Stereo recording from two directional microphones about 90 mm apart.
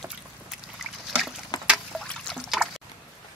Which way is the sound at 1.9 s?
5° left (ahead or behind).